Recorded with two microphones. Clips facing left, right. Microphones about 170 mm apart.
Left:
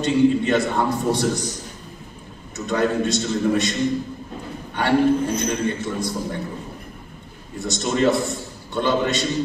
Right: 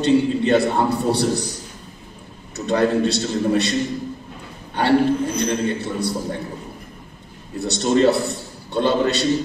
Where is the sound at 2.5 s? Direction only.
35° right (ahead or behind).